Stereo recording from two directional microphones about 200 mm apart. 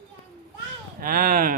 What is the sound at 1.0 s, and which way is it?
Speech, 45° right (ahead or behind).